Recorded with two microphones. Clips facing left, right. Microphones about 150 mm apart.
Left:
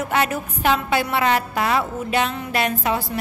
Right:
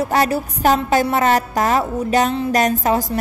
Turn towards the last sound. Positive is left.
turn(degrees=-40)  # may be behind; listen again after turning